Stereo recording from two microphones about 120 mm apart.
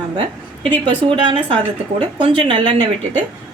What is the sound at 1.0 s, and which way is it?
A woman's voice, 45° right (ahead or behind).